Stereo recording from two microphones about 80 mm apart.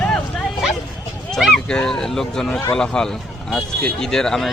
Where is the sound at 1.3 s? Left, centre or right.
Centre.